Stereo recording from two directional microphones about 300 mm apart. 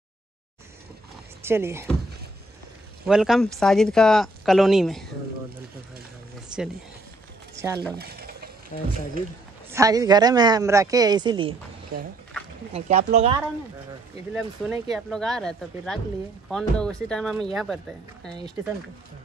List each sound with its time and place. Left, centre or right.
1.4 s speech: centre
3.1 s speech: centre
7.5 s speech: centre
8.0 s stir: right
8.7 s speech: left
9.7 s speech: centre
11.9 s speech: right
14.3 s speech: centre